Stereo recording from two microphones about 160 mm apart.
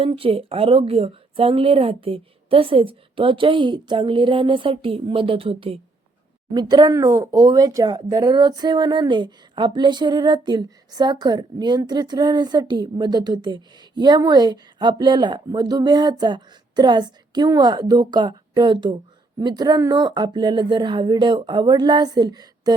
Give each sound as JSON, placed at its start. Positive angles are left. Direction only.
{"t": 0.0, "sound": "a woman's voice", "side_deg": -35}